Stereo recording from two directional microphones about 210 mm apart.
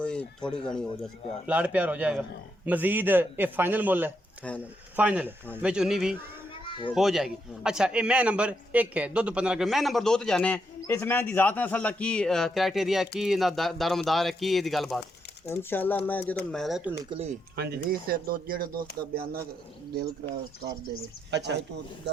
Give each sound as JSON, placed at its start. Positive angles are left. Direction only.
{"t": 0.0, "sound": "a man's voice", "side_deg": 5}
{"t": 4.4, "sound": "a man's voice", "side_deg": 5}
{"t": 4.9, "sound": "a man's voice", "side_deg": -5}
{"t": 17.1, "sound": "speech", "side_deg": -30}
{"t": 17.6, "sound": "speech", "side_deg": -45}